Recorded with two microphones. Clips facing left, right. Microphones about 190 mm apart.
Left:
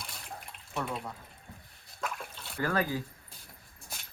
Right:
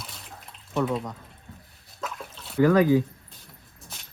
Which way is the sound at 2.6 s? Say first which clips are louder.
Right 12 dB; 15° right (ahead or behind).